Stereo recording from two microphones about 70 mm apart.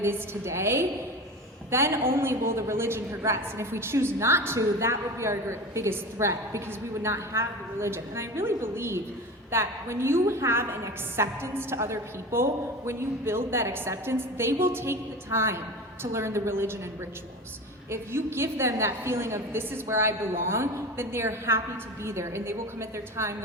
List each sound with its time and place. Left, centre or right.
0.0 s a woman's voice: right
17.9 s a woman's voice: right